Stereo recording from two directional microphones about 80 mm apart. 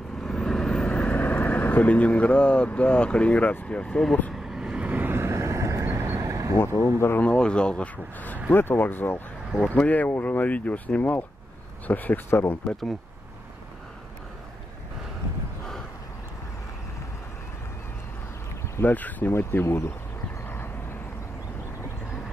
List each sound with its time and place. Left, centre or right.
0.2 s vehicle: centre
4.3 s vehicle: centre; by 6.5 s right
6.6 s speech: left
7.2 s speech: centre
18.8 s speech: left
20.4 s vehicle: left